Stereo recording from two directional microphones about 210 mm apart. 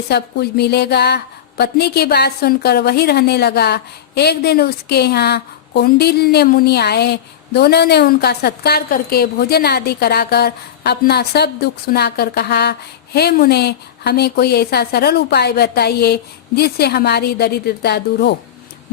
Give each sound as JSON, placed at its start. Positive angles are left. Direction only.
{"t": 0.1, "sound": "speech", "side_deg": 50}